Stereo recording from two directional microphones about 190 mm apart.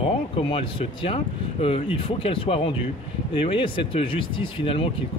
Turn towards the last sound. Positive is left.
turn(degrees=30)  # may be behind; listen again after turning